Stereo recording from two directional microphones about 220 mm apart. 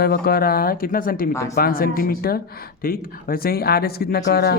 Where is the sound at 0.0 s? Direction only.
45° left (ahead or behind).